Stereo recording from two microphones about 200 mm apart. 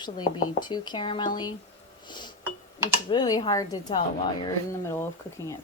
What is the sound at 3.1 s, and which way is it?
A woman's voice, 20° left (ahead or behind).